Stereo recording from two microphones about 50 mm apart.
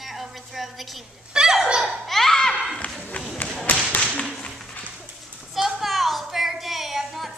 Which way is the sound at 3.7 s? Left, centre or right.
Left.